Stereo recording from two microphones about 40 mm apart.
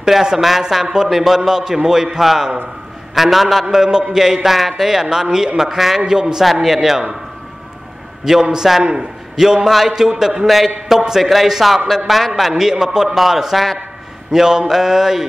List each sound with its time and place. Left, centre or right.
0.0 s a man's voice: centre
6.4 s a man's voice: centre
8.3 s a man's voice: centre
10.4 s a man's voice: centre